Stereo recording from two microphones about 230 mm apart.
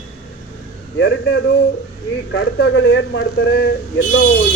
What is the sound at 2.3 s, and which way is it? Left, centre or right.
A man's voice, left.